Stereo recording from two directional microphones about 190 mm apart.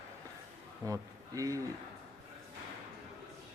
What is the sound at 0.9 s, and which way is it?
Speech, 20° right (ahead or behind).